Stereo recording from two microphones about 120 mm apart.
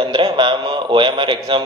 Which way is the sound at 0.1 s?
45° right (ahead or behind).